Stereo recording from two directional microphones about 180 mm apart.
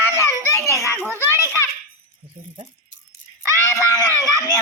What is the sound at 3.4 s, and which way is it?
Screaming, 15° left (ahead or behind).